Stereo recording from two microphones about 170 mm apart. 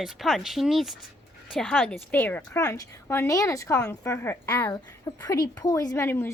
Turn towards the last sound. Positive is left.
turn(degrees=15)  # may be behind; listen again after turning